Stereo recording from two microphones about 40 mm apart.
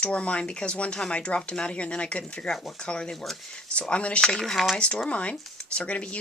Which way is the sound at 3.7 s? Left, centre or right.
Left.